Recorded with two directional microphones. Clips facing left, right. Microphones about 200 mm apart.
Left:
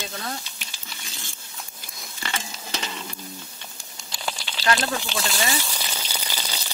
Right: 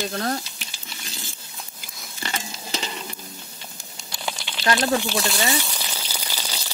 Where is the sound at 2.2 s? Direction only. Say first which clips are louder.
Right 1 dB; 25° right (ahead or behind).